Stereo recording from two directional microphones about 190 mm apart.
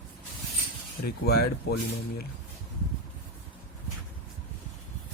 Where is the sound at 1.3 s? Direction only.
55° left (ahead or behind).